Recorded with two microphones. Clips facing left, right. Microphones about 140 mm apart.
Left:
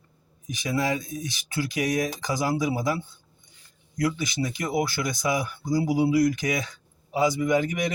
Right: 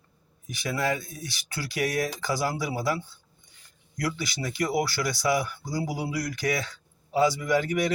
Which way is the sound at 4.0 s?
20° left (ahead or behind).